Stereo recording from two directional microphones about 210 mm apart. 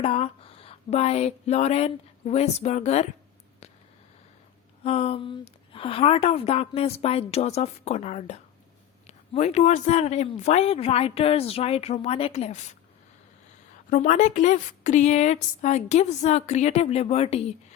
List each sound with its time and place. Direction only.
0.0 s speech: 30° left (ahead or behind)
3.6 s a sound: 30° left (ahead or behind)
4.8 s a woman's voice: 30° left (ahead or behind)
13.9 s a man's voice: 35° left (ahead or behind)